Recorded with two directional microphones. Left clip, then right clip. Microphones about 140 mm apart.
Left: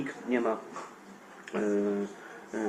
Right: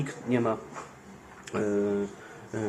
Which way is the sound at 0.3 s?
25° right (ahead or behind).